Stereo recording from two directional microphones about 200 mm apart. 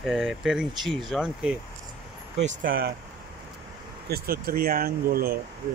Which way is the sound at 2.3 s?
40° right (ahead or behind).